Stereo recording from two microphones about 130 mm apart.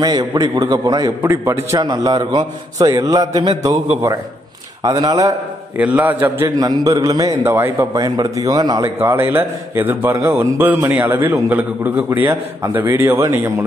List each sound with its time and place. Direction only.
0.0 s a man's voice: 30° right (ahead or behind)
1.2 s a man's voice: 20° right (ahead or behind)
1.8 s a man's voice: 30° right (ahead or behind)
4.8 s a man's voice: 30° right (ahead or behind)
5.8 s a man's voice: 10° right (ahead or behind); by 8.8 s 30° right (ahead or behind)
8.8 s a man's voice: 15° right (ahead or behind)